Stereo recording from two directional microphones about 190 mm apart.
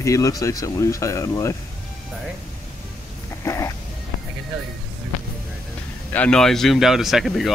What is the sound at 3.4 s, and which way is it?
Music, 15° left (ahead or behind).